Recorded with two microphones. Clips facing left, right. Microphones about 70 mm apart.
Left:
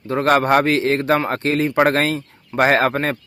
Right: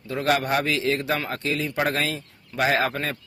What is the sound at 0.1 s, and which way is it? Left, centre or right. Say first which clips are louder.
Speech: left 8 dB; left.